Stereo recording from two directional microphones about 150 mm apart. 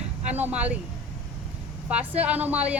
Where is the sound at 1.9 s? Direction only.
10° right (ahead or behind).